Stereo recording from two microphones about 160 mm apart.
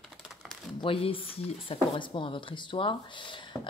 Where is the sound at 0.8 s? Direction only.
35° left (ahead or behind).